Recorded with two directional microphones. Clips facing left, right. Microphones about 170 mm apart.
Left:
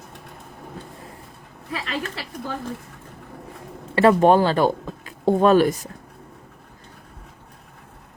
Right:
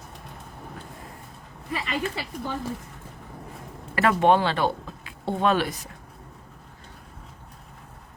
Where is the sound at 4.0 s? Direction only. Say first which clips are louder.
Left 5 dB; 35° left (ahead or behind).